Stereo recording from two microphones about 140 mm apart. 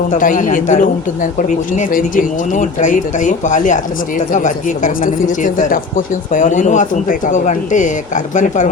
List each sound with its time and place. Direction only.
0.1 s speech: 70° left (ahead or behind)